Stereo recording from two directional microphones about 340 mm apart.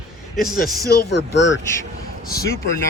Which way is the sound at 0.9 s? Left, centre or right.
Left.